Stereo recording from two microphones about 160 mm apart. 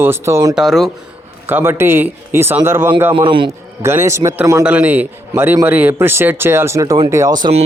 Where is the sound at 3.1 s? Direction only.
30° right (ahead or behind).